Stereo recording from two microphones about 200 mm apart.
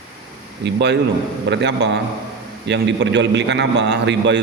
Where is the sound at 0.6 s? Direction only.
60° right (ahead or behind).